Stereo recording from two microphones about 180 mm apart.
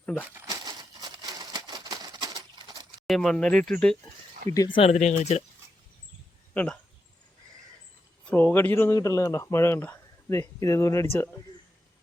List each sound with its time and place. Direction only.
0.0 s speech: 5° left (ahead or behind)
0.3 s a sound: 20° right (ahead or behind)
3.1 s speech: 5° left (ahead or behind)
4.5 s speech: 25° left (ahead or behind)
6.5 s speech: 10° left (ahead or behind)
8.3 s speech: 10° left (ahead or behind)